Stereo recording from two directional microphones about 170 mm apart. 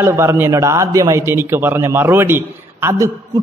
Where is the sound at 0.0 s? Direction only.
15° right (ahead or behind).